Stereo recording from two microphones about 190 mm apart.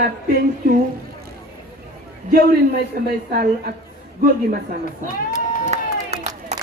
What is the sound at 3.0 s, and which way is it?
Speech, 50° right (ahead or behind).